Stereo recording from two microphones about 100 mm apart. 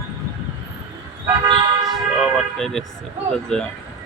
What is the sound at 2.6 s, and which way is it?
Speech, 5° left (ahead or behind).